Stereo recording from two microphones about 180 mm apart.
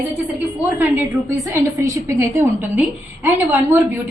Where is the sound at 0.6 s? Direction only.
10° right (ahead or behind).